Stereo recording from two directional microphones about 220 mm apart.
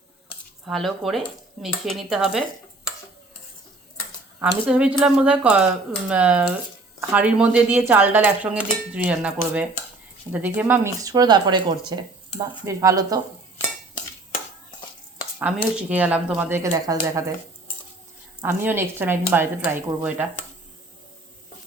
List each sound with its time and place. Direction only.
0.6 s speech: centre (ahead or behind)
4.4 s speech: 5° right (ahead or behind)
15.4 s speech: 5° right (ahead or behind)
18.4 s speech: 10° right (ahead or behind)